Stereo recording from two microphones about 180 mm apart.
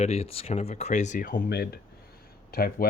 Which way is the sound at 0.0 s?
35° left (ahead or behind).